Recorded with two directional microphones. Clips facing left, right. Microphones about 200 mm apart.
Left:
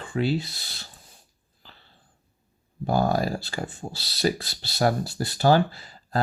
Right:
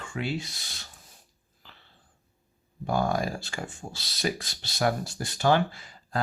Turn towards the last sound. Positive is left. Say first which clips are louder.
# left 3 dB
turn(degrees=35)  # may be behind; listen again after turning